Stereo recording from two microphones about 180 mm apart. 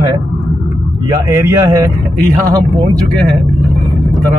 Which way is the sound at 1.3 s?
20° right (ahead or behind).